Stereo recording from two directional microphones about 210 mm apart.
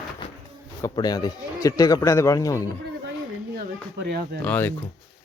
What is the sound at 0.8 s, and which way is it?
Speech, 15° left (ahead or behind).